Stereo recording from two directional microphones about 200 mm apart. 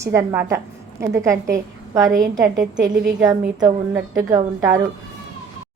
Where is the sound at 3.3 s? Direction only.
20° right (ahead or behind).